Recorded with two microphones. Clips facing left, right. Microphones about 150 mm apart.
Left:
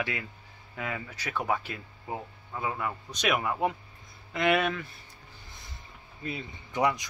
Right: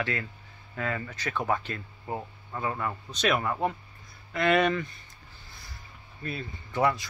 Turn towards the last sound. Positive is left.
turn(degrees=15)  # may be behind; listen again after turning